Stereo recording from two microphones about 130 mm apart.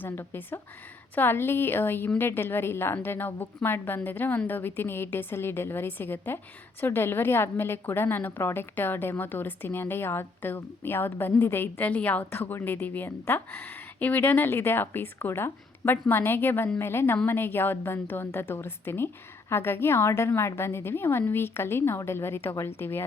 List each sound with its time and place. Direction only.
0.0 s a woman's voice: 15° left (ahead or behind)